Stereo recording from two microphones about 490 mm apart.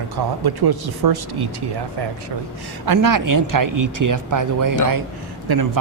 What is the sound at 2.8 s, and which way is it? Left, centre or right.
Speech, right.